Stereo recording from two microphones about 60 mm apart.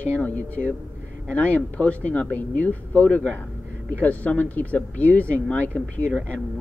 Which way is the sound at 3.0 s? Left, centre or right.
Centre.